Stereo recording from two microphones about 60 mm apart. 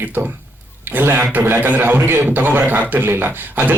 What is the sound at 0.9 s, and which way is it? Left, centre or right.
Speech, right.